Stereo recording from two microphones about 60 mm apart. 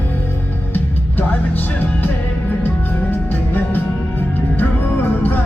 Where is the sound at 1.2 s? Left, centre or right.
Left.